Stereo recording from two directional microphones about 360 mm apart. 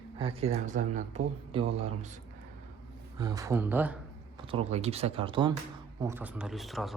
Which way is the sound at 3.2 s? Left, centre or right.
Centre.